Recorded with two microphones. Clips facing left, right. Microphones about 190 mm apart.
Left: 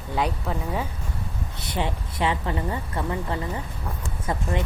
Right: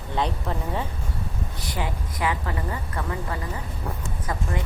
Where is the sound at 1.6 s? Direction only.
25° left (ahead or behind).